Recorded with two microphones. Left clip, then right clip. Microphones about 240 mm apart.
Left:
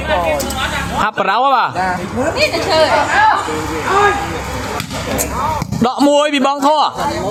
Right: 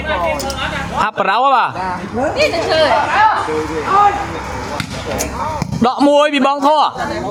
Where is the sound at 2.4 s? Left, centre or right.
Right.